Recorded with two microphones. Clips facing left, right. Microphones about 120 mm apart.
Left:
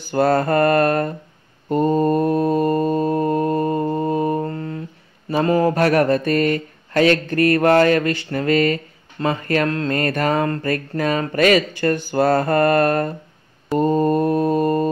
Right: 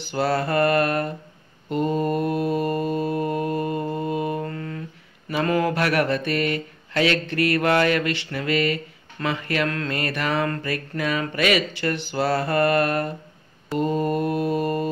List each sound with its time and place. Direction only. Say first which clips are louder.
0.1 s mantra: left 6 dB; 45° left (ahead or behind)
5.3 s speech: left 5 dB; 35° left (ahead or behind)
13.7 s mantra: left 6 dB; 40° left (ahead or behind)